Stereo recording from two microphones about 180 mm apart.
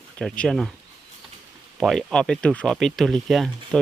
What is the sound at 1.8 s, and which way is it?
Speech, centre (ahead or behind).